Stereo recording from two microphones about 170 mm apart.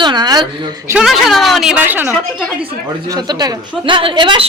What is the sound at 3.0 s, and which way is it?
Speech, 20° right (ahead or behind).